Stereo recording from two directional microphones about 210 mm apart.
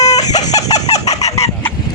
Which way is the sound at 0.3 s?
35° left (ahead or behind).